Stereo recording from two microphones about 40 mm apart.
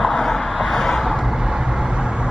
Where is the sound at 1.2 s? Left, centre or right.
Centre.